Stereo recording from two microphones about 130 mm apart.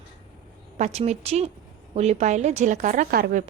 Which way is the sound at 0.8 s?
55° right (ahead or behind).